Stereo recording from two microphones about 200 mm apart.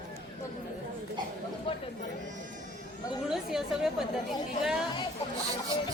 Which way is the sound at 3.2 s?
Centre (ahead or behind).